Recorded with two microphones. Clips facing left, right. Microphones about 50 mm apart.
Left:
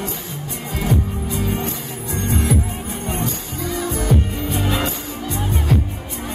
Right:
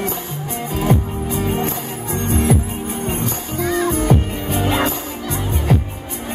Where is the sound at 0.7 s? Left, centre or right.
Right.